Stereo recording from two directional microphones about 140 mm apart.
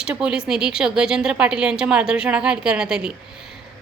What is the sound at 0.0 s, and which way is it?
A woman's voice, 5° right (ahead or behind).